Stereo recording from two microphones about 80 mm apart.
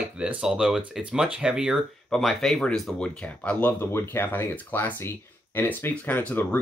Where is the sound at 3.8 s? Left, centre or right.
Left.